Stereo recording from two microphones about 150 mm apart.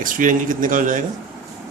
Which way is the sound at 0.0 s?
60° right (ahead or behind).